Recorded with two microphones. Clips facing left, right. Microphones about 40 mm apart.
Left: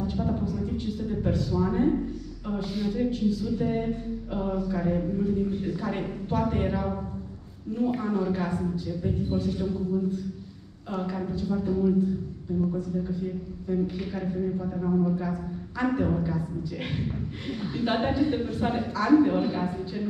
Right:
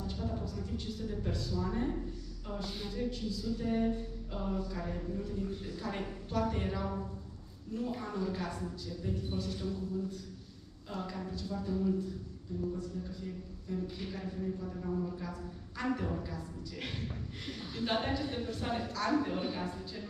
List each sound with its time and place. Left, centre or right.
0.0 s a sound: left
2.9 s a woman's voice: left
10.9 s a woman's voice: left
13.0 s a woman's voice: left
14.6 s a man's voice: left
17.5 s a woman's voice: left